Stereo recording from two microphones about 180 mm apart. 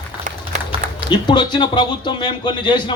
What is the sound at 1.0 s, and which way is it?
A man's voice, 25° left (ahead or behind).